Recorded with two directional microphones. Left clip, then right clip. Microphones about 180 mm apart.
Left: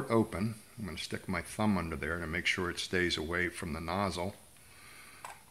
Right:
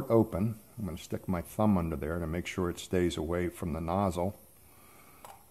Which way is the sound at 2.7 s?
55° right (ahead or behind).